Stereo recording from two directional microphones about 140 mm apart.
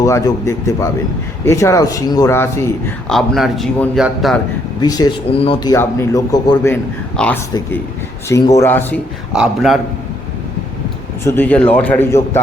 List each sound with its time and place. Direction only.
0.0 s a man's voice: 20° left (ahead or behind)
3.1 s speech: centre (ahead or behind)
4.8 s speech: 30° left (ahead or behind)
5.3 s speech: 40° left (ahead or behind)
5.6 s speech: 20° left (ahead or behind)
7.2 s a man's voice: 5° left (ahead or behind)
8.3 s speech: 20° left (ahead or behind)
9.3 s speech: 5° right (ahead or behind)
11.2 s a man's voice: 15° left (ahead or behind)